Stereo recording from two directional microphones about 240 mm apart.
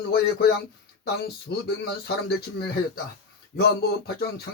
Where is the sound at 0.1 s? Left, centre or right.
Left.